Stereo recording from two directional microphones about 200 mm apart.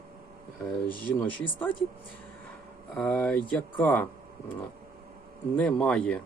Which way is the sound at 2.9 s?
5° left (ahead or behind).